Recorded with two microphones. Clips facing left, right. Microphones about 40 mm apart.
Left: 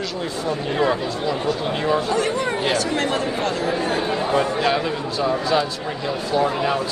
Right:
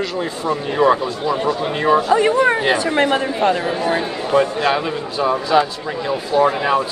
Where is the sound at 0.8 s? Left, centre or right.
Right.